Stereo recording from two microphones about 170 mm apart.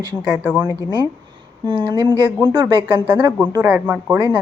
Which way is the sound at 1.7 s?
30° right (ahead or behind).